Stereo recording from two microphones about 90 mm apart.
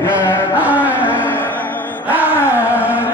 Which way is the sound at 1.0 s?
20° left (ahead or behind).